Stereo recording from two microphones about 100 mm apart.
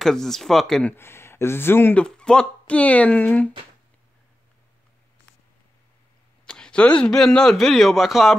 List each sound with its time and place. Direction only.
0.0 s speech: 5° left (ahead or behind)
0.8 s speech: 25° left (ahead or behind)
2.0 s speech: 10° left (ahead or behind)
6.4 s speech: 10° left (ahead or behind)